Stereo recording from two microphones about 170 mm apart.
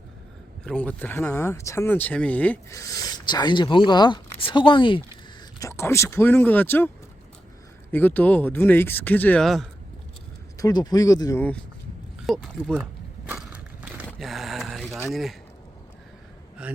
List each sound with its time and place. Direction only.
0.6 s speech: 5° left (ahead or behind)
2.7 s speech: 20° left (ahead or behind)
5.5 s speech: 15° left (ahead or behind); by 9.6 s centre (ahead or behind)
10.6 s speech: 25° left (ahead or behind)
12.2 s speech: centre (ahead or behind)
13.2 s crushing: 10° right (ahead or behind)
14.2 s a sound: centre (ahead or behind)
15.1 s speech: centre (ahead or behind)
16.6 s a man's voice: 5° right (ahead or behind)